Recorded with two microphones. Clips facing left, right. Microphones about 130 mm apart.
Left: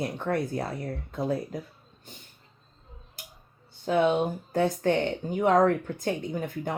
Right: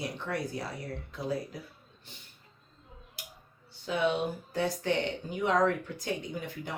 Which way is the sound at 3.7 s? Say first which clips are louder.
Left 6 dB; 50° left (ahead or behind).